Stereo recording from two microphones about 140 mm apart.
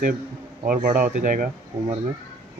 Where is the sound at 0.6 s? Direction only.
85° right; by 1.4 s 65° right (ahead or behind).